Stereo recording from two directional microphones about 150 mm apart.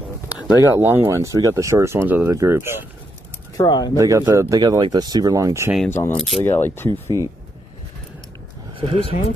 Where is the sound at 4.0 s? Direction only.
20° right (ahead or behind).